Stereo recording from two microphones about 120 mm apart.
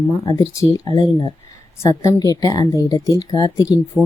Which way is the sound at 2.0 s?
30° left (ahead or behind).